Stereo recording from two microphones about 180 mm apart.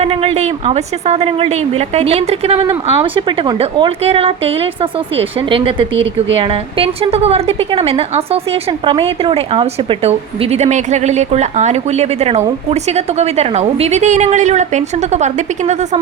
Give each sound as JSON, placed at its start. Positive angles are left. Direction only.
{"t": 0.0, "sound": "a woman's voice", "side_deg": -35}